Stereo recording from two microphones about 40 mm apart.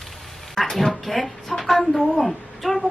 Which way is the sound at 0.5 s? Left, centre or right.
Centre.